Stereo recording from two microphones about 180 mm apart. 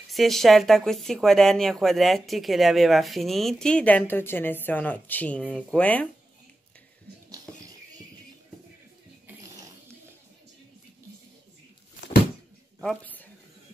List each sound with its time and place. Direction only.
0.1 s speech: centre (ahead or behind)
12.8 s speech: 10° left (ahead or behind)